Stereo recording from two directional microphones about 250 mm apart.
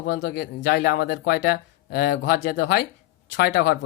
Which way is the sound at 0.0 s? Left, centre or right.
Left.